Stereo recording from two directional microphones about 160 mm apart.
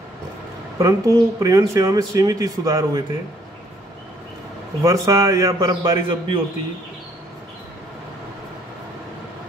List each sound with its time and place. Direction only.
0.7 s speech: 20° right (ahead or behind)
4.8 s speech: 20° right (ahead or behind)
5.7 s a man's voice: 30° right (ahead or behind)